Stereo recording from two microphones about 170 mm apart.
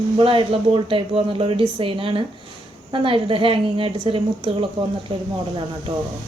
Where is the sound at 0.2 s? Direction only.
30° right (ahead or behind).